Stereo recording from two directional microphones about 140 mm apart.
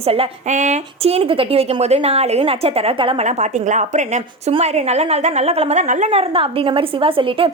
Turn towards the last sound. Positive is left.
turn(degrees=-40)  # may be behind; listen again after turning